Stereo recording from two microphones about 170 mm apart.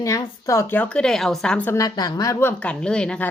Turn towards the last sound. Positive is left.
turn(degrees=5)  # may be behind; listen again after turning